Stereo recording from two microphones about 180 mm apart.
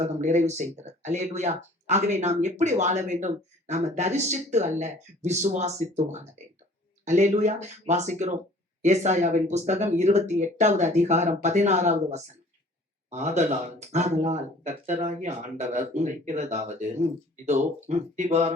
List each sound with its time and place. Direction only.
0.0 s a man's voice: 40° right (ahead or behind)